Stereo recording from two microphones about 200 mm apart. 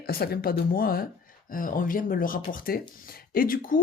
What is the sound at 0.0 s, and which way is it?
Speech, 50° left (ahead or behind).